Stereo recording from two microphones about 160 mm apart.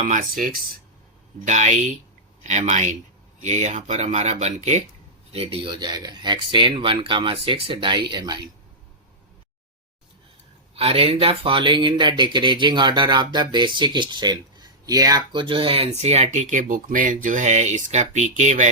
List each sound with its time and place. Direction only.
0.0 s speech: 55° right (ahead or behind); by 8.4 s 25° right (ahead or behind)
10.8 s speech: 40° right (ahead or behind)